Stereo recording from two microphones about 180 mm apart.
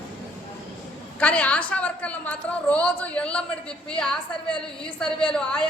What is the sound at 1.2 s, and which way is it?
A woman's voice, 5° left (ahead or behind).